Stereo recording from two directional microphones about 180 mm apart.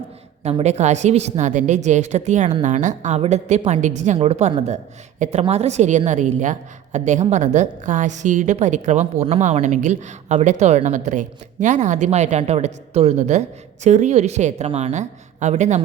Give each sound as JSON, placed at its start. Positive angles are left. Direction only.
{"t": 0.4, "sound": "a woman's voice", "side_deg": -35}